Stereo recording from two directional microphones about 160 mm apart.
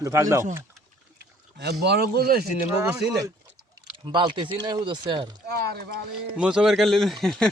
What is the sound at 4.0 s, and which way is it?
Speech, 30° right (ahead or behind).